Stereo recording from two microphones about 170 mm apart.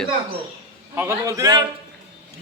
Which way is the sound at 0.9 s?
15° right (ahead or behind).